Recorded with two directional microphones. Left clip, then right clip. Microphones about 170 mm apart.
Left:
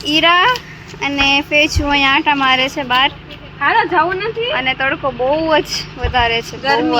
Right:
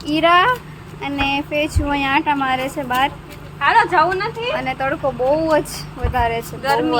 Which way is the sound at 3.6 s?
45° left (ahead or behind).